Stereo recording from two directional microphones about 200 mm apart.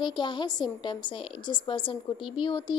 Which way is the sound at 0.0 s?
20° left (ahead or behind).